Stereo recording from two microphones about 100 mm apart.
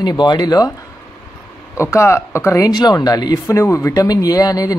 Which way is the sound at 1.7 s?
30° left (ahead or behind).